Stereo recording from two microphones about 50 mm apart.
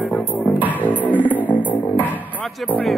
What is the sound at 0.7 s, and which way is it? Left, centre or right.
Music, left.